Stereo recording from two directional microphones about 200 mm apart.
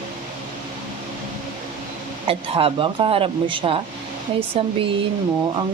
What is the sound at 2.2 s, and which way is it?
Speech, 25° right (ahead or behind).